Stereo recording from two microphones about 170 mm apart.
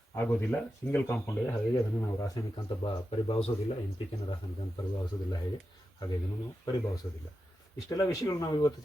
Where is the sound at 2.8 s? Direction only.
35° left (ahead or behind).